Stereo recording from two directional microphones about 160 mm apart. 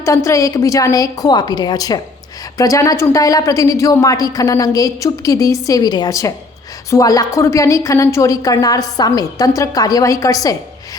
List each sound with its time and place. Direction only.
0.0 s a woman's voice: 20° left (ahead or behind)